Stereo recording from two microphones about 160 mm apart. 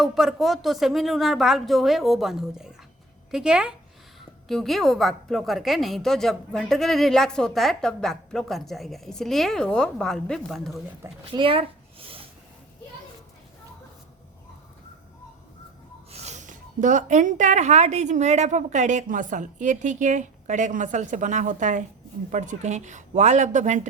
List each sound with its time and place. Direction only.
0.0 s a woman's voice: centre (ahead or behind)
11.0 s speech: 20° right (ahead or behind)
11.3 s a sound: 35° right (ahead or behind)
16.1 s a woman's voice: 45° right (ahead or behind)